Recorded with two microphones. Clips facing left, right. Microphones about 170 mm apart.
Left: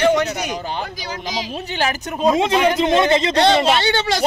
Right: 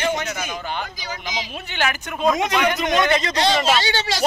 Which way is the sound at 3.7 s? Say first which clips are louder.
Left 4 dB; 55° left (ahead or behind).